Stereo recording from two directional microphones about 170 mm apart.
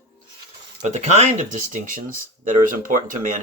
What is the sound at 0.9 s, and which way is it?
Speech, 45° right (ahead or behind).